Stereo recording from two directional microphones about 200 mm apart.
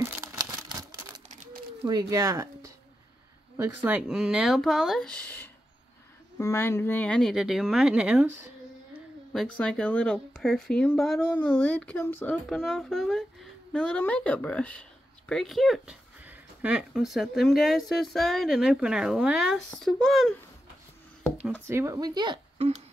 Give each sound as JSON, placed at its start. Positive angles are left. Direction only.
{"t": 1.9, "sound": "speech", "side_deg": -20}
{"t": 21.6, "sound": "speech", "side_deg": -15}